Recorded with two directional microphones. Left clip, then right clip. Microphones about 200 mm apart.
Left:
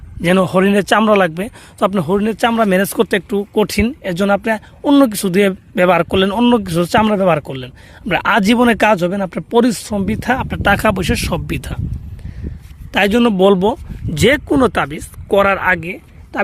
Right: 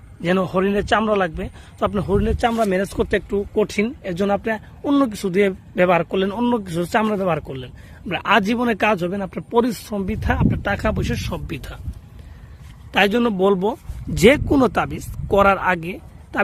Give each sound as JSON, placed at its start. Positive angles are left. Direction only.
{"t": 0.2, "sound": "a man's voice", "side_deg": 55}
{"t": 12.9, "sound": "a man's voice", "side_deg": 45}
{"t": 14.2, "sound": "speech", "side_deg": 15}